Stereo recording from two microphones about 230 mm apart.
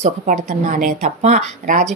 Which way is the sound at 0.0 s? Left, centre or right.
Right.